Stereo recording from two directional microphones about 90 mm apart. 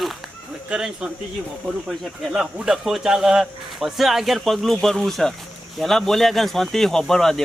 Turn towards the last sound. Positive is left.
turn(degrees=5)  # may be behind; listen again after turning